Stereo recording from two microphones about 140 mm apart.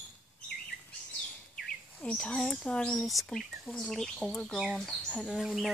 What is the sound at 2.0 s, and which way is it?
Speech, 5° left (ahead or behind).